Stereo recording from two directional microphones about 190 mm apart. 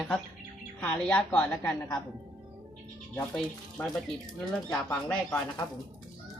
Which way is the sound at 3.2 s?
5° left (ahead or behind).